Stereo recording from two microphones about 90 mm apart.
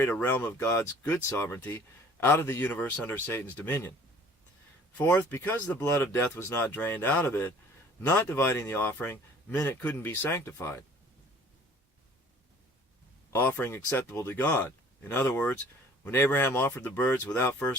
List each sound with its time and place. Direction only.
0.0 s speech: 20° left (ahead or behind)
4.9 s speech: 25° left (ahead or behind)
13.3 s speech: 20° left (ahead or behind)